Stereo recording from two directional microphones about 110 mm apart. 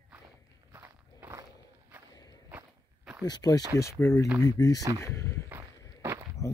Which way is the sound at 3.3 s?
35° left (ahead or behind).